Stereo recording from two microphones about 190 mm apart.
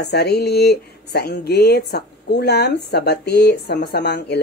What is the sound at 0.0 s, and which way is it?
Speech, 60° left (ahead or behind).